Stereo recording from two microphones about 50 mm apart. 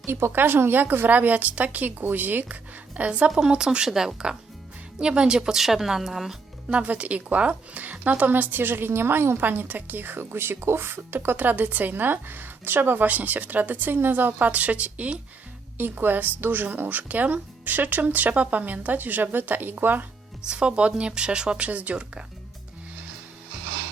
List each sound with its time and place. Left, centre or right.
0.0 s a woman's voice: right
3.1 s speech: right; by 6.3 s centre
6.7 s a woman's voice: right
15.8 s a woman's voice: right
20.5 s speech: right